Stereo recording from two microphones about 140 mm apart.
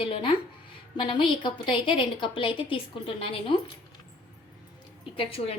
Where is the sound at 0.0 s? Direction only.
40° left (ahead or behind).